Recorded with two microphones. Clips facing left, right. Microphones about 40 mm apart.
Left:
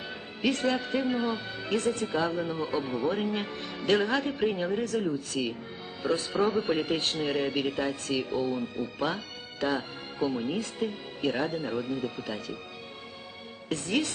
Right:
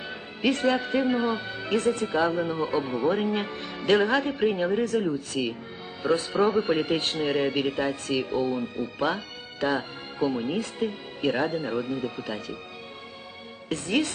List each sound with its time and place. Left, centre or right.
0.0 s speech: centre
13.7 s speech: centre